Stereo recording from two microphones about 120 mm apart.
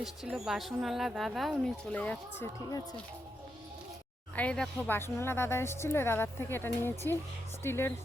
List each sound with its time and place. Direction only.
0.0 s speech: 5° right (ahead or behind); by 2.5 s 15° left (ahead or behind)
4.4 s speech: 10° left (ahead or behind)
4.9 s speech: 20° left (ahead or behind)